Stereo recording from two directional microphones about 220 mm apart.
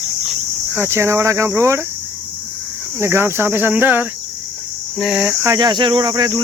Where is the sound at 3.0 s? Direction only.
10° right (ahead or behind).